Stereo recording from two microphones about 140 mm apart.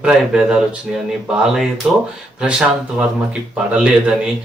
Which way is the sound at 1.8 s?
5° right (ahead or behind).